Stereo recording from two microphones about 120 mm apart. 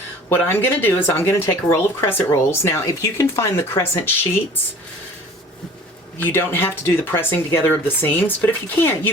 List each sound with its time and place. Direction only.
0.3 s speech: 20° left (ahead or behind)
6.1 s speech: 20° left (ahead or behind)